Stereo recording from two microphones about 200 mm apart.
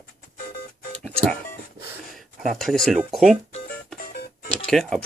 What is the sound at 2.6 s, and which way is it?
Speech, centre (ahead or behind).